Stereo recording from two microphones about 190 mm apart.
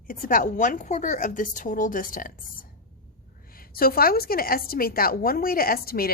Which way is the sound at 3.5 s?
50° left (ahead or behind).